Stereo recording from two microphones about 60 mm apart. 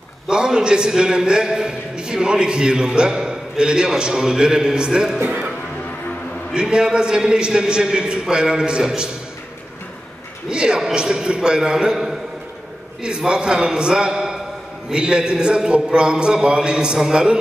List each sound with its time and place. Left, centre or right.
0.3 s a man's voice: centre
6.5 s a man's voice: centre
10.5 s a man's voice: centre